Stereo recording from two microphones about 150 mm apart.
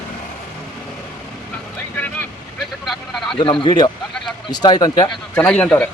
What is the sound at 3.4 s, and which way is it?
Speech, 35° left (ahead or behind).